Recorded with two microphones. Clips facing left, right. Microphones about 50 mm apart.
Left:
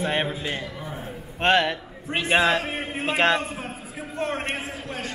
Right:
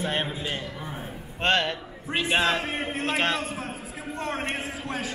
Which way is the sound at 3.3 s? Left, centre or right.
Centre.